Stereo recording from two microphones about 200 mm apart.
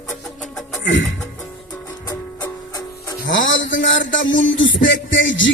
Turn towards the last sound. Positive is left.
turn(degrees=70)  # may be behind; listen again after turning